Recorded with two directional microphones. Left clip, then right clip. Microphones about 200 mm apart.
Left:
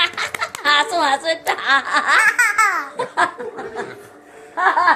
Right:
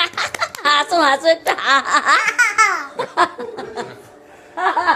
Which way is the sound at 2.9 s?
60° right (ahead or behind).